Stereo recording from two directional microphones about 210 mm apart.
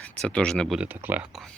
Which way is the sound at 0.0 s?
5° left (ahead or behind).